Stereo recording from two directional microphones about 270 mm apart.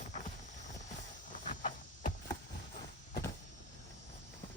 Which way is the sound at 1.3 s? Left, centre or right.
Left.